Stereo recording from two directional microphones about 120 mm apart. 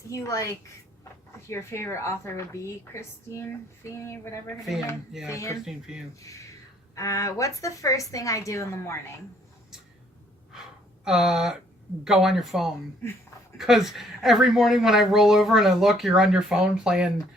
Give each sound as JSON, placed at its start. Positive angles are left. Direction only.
{"t": 0.1, "sound": "a woman's voice", "side_deg": 25}
{"t": 5.6, "sound": "speech", "side_deg": -5}
{"t": 6.1, "sound": "a woman's voice", "side_deg": 25}
{"t": 11.0, "sound": "speech", "side_deg": -5}